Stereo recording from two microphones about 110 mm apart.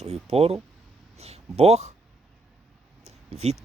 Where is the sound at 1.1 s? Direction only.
75° right (ahead or behind).